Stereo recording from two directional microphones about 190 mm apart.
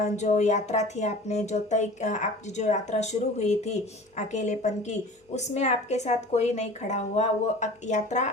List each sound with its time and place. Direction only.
0.0 s a woman's voice: 35° left (ahead or behind)